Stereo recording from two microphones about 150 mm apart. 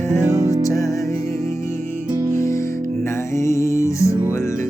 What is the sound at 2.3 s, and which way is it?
Music, 20° left (ahead or behind).